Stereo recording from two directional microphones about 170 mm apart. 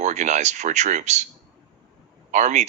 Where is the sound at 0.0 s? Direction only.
45° right (ahead or behind).